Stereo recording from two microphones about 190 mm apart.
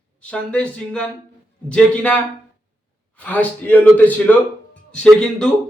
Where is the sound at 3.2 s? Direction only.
10° left (ahead or behind).